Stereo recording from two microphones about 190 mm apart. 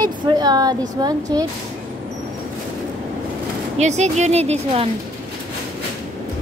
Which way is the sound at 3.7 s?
35° right (ahead or behind).